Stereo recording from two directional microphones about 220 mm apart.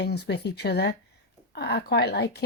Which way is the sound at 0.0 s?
50° left (ahead or behind).